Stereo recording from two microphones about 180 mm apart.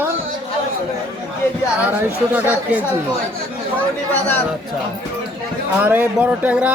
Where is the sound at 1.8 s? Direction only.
10° right (ahead or behind).